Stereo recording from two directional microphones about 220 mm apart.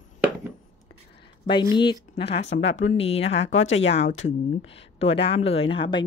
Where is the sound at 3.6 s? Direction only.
60° left (ahead or behind).